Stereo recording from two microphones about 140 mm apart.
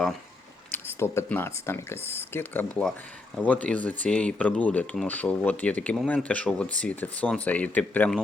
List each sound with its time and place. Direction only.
0.7 s speech: 15° left (ahead or behind)